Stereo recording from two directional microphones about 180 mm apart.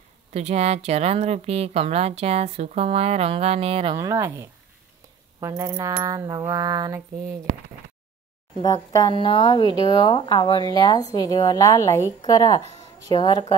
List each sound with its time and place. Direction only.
0.3 s a woman's voice: 35° right (ahead or behind); by 4.5 s 15° right (ahead or behind)
5.4 s pulleys: 15° right (ahead or behind)
8.9 s speech: 25° left (ahead or behind)